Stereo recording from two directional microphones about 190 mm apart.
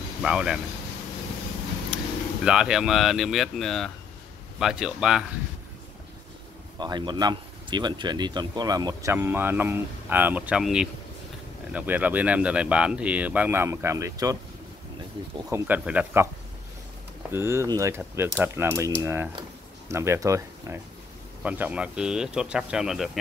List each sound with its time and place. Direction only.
0.2 s speech: 5° right (ahead or behind)
1.9 s vehicle: 5° right (ahead or behind)
2.4 s speech: 5° right (ahead or behind)
6.8 s speech: 25° right (ahead or behind)
15.5 s speech: 10° right (ahead or behind)
17.3 s speech: 15° right (ahead or behind)